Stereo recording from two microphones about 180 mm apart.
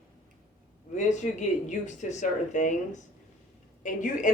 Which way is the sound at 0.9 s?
40° left (ahead or behind).